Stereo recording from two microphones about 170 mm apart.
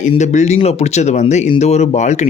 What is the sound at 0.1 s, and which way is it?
Speech, 45° left (ahead or behind).